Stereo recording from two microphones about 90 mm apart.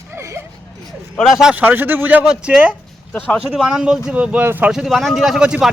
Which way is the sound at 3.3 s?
5° right (ahead or behind).